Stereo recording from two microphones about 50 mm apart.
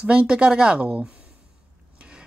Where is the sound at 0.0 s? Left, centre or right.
Right.